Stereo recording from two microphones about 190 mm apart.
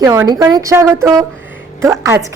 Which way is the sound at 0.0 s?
15° right (ahead or behind).